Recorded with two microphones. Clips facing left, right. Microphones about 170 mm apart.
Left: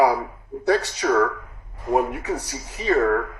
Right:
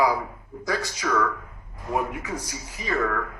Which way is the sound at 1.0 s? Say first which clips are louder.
Left 5 dB; 50° left (ahead or behind).